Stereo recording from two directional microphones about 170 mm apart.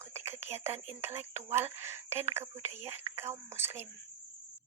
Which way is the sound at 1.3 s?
15° right (ahead or behind).